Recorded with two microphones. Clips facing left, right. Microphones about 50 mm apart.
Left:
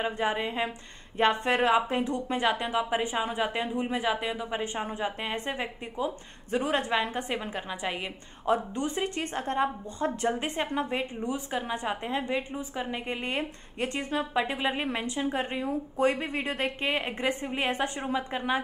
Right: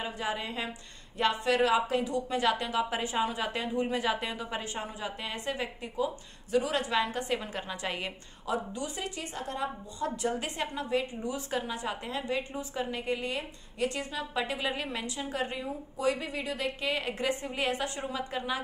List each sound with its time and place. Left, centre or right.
0.0 s a woman's voice: left
4.8 s a woman's voice: left
7.5 s a woman's voice: centre
8.5 s a woman's voice: left